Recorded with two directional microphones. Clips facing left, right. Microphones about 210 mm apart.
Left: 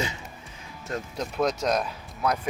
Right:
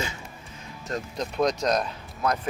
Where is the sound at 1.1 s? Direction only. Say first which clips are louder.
Right 1 dB; 5° left (ahead or behind).